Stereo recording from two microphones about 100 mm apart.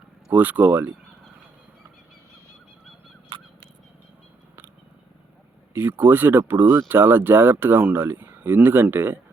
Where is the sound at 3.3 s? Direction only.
55° right (ahead or behind).